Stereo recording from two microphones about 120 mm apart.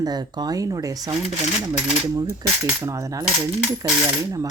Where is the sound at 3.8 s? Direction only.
30° right (ahead or behind).